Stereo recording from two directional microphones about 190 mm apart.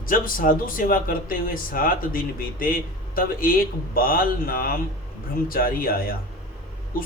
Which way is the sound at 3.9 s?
50° left (ahead or behind).